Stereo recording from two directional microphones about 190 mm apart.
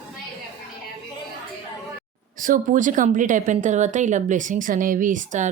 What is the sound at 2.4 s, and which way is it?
Speech, 45° right (ahead or behind).